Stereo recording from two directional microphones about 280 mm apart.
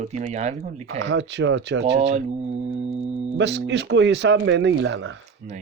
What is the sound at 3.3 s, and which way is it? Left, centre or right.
Speech, right.